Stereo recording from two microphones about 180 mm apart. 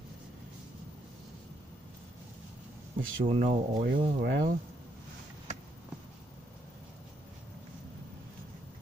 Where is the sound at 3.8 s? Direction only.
70° right (ahead or behind).